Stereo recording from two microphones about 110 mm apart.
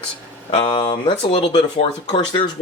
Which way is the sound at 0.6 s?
50° left (ahead or behind).